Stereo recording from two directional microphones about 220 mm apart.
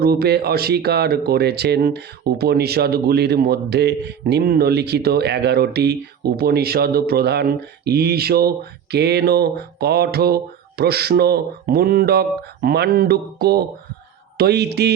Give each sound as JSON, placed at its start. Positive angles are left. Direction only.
{"t": 0.0, "sound": "speech", "side_deg": -45}